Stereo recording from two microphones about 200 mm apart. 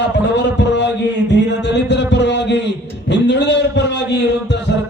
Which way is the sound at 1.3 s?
60° left (ahead or behind).